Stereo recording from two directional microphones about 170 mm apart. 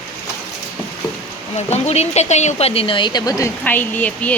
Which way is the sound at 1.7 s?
40° left (ahead or behind).